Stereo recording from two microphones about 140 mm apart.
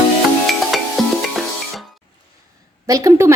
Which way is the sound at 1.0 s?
Centre (ahead or behind).